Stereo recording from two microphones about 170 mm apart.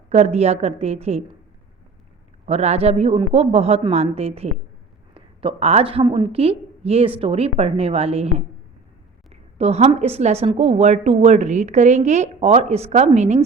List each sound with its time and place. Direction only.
0.1 s a woman's voice: 40° right (ahead or behind)
2.5 s a woman's voice: 40° right (ahead or behind)